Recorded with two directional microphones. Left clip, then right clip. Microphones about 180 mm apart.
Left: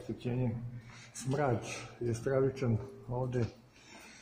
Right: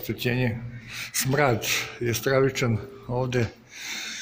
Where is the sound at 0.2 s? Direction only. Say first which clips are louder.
Right 13 dB; 10° right (ahead or behind).